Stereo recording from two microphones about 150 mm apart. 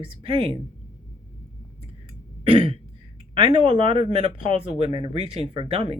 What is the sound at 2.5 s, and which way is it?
Throat clearing, 35° right (ahead or behind).